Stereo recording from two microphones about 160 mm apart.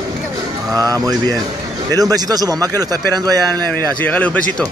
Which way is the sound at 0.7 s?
20° right (ahead or behind).